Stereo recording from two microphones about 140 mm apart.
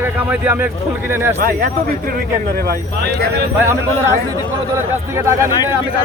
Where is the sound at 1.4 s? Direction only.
90° right.